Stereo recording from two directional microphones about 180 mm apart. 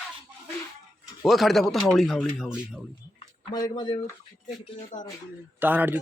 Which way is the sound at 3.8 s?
25° left (ahead or behind).